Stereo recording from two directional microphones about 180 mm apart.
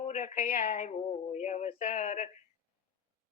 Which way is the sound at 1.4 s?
40° left (ahead or behind).